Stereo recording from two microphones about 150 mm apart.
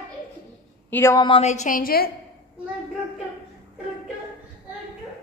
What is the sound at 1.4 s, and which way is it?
Speech, 55° left (ahead or behind).